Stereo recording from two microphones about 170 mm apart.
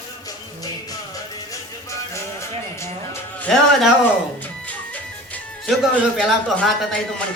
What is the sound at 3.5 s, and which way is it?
Speech, centre (ahead or behind).